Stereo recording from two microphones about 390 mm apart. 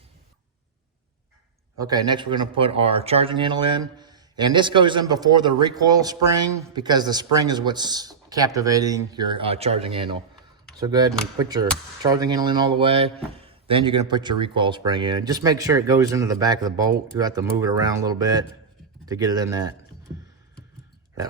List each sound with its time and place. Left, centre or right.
1.8 s a man's voice: centre